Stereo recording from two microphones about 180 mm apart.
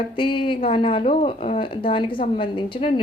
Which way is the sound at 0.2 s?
30° left (ahead or behind).